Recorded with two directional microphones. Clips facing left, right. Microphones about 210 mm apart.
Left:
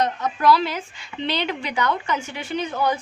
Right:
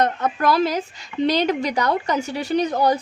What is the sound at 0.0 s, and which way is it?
A woman's voice, 55° right (ahead or behind).